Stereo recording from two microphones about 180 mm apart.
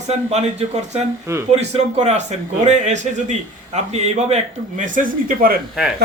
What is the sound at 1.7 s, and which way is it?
A man's voice, 40° right (ahead or behind).